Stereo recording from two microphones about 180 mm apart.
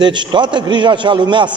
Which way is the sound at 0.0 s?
25° right (ahead or behind).